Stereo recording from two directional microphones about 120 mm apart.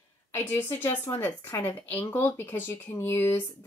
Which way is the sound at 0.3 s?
15° left (ahead or behind).